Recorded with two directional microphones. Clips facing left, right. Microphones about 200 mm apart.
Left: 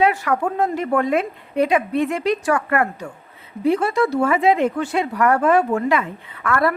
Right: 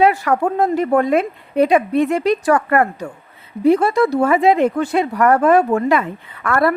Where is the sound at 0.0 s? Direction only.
40° right (ahead or behind).